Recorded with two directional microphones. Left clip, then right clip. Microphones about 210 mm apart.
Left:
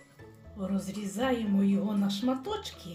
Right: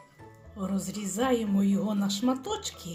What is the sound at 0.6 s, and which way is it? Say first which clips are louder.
Speech: right 1 dB; 25° right (ahead or behind).